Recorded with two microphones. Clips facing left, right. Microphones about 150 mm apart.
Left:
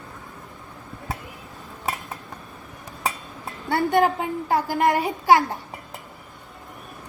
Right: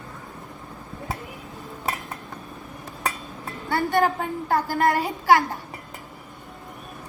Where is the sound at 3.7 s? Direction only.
20° left (ahead or behind).